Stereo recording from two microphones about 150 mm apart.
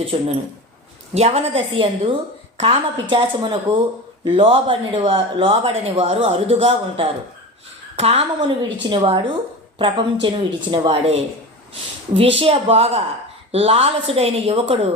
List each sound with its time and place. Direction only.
0.0 s a woman's voice: 40° right (ahead or behind)
8.4 s speech: 30° right (ahead or behind)